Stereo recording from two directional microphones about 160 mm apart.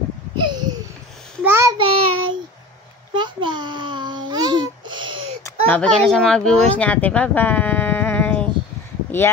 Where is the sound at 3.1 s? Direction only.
30° right (ahead or behind).